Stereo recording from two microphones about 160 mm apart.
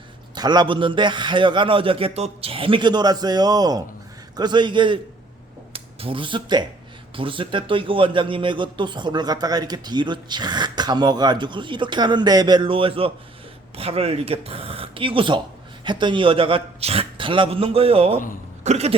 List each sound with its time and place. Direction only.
0.3 s a man's voice: 25° right (ahead or behind); by 18.9 s 45° right (ahead or behind)